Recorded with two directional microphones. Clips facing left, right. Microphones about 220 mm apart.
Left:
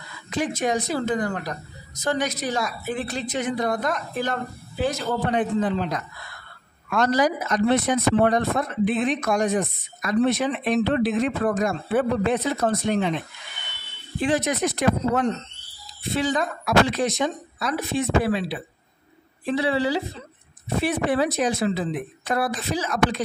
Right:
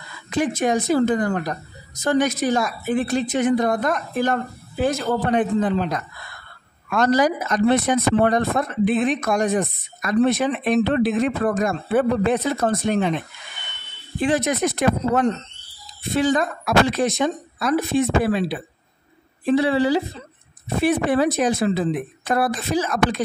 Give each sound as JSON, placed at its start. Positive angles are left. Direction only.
{"t": 0.4, "sound": "speech", "side_deg": -50}
{"t": 14.2, "sound": "speech", "side_deg": -50}